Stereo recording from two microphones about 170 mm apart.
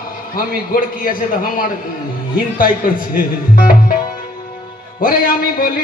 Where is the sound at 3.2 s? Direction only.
55° left (ahead or behind).